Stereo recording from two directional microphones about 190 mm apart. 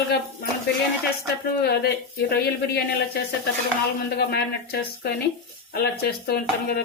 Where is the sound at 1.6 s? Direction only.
60° left (ahead or behind).